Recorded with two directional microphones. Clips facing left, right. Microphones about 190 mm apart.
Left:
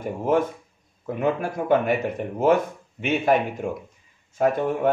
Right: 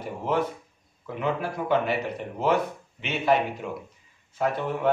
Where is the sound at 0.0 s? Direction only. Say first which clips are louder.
Left 5 dB; 50° left (ahead or behind).